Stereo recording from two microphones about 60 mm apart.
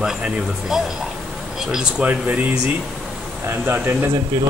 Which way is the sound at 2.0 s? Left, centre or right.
Right.